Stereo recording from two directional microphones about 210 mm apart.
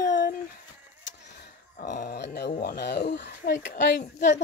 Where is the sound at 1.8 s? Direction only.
40° left (ahead or behind); by 3.9 s 55° left (ahead or behind).